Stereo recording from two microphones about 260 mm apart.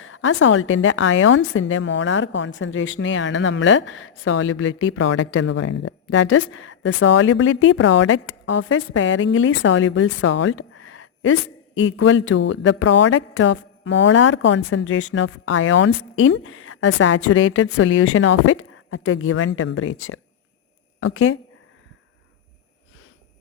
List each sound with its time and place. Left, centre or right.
0.0 s a woman's voice: left
21.0 s a woman's voice: left